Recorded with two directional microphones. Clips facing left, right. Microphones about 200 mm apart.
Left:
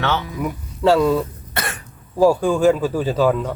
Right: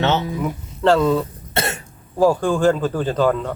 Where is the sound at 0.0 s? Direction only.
25° right (ahead or behind).